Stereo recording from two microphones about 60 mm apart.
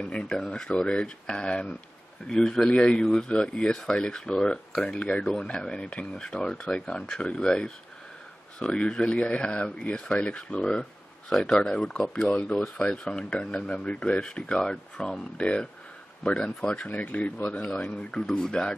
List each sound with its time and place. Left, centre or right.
0.0 s speech: centre